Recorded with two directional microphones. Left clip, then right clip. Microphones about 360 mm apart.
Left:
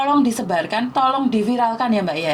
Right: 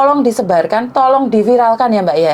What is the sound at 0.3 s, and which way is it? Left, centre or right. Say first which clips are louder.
A woman's voice: right 9 dB; right.